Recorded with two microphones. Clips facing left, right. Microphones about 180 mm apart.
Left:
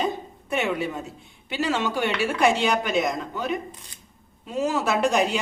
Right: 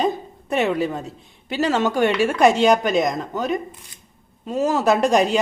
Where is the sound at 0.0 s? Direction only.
35° right (ahead or behind).